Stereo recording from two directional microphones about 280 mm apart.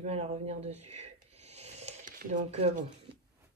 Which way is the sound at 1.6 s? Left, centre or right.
Right.